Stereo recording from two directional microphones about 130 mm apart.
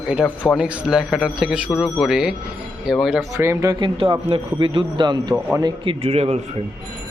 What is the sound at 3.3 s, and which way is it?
Speech, 20° right (ahead or behind).